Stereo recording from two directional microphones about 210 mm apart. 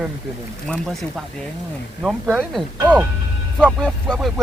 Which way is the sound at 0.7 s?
Centre (ahead or behind).